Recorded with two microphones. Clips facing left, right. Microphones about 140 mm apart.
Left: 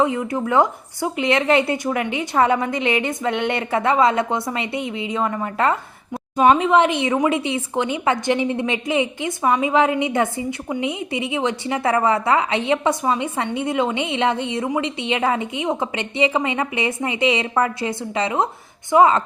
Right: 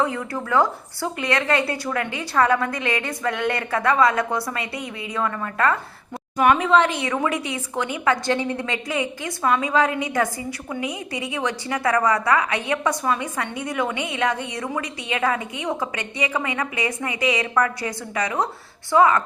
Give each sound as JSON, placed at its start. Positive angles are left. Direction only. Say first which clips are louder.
{"t": 0.0, "sound": "a woman's voice", "louder": "left 4 dB", "side_deg": 20}